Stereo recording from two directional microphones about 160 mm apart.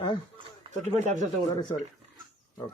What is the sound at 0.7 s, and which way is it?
Speech, 45° right (ahead or behind).